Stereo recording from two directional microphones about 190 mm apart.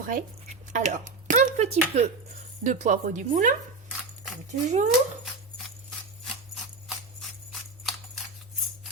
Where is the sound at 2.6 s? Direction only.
40° right (ahead or behind).